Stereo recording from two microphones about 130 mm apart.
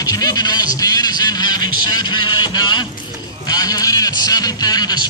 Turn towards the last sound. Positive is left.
turn(degrees=30)  # may be behind; listen again after turning